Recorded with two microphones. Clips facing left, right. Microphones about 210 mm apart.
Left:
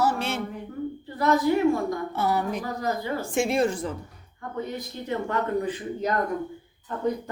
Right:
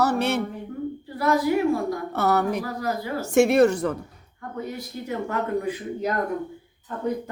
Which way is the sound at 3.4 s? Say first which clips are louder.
Right 7 dB; 70° right (ahead or behind).